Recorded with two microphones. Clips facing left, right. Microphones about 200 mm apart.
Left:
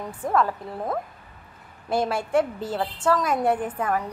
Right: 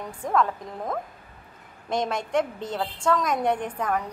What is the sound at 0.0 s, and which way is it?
A woman's voice, 5° left (ahead or behind).